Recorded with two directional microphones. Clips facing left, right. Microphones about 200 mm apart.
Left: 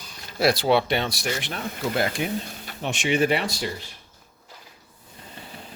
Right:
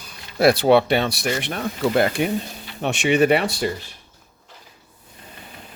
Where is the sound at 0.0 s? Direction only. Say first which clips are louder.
Right 5 dB; 55° right (ahead or behind).